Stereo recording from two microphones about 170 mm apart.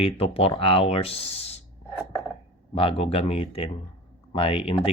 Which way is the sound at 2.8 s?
35° left (ahead or behind).